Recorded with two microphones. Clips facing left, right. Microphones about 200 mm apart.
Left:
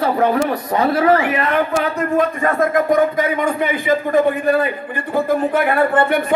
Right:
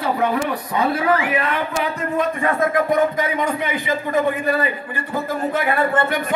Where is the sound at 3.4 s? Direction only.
55° left (ahead or behind).